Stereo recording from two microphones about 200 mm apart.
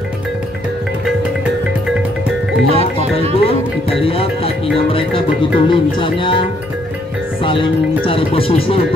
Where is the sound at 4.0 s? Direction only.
30° left (ahead or behind).